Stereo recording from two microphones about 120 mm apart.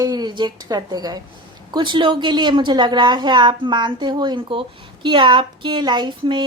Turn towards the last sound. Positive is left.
turn(degrees=-40)  # may be behind; listen again after turning